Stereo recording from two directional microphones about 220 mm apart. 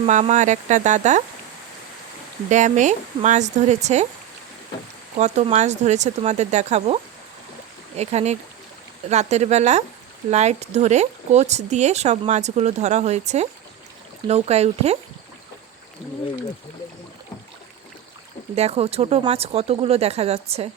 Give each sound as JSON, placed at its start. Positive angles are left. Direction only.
{"t": 0.0, "sound": "speech", "side_deg": -30}
{"t": 2.5, "sound": "speech", "side_deg": -35}
{"t": 5.1, "sound": "speech", "side_deg": -30}
{"t": 18.5, "sound": "speech", "side_deg": -30}